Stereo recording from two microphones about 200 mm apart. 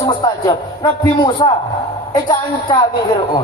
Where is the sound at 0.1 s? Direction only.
20° left (ahead or behind).